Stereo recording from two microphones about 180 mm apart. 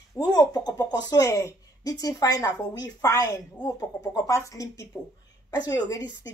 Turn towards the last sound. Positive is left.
turn(degrees=20)  # may be behind; listen again after turning